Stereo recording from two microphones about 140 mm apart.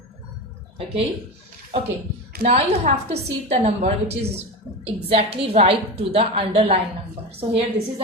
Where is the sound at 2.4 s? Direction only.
50° right (ahead or behind).